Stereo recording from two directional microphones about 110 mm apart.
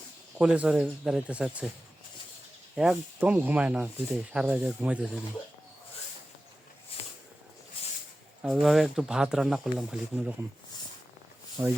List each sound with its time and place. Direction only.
0.3 s speech: 10° right (ahead or behind)
2.7 s speech: 5° right (ahead or behind)
6.9 s a sound: 60° left (ahead or behind)
8.4 s speech: centre (ahead or behind)
11.6 s speech: 25° right (ahead or behind)